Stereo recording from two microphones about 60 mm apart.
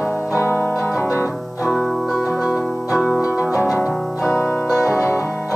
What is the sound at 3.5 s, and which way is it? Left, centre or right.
Music, left.